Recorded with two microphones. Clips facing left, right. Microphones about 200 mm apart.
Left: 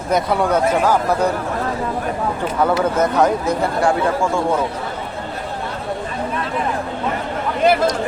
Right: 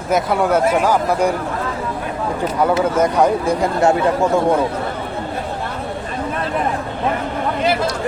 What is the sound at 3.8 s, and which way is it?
Speech, 20° right (ahead or behind).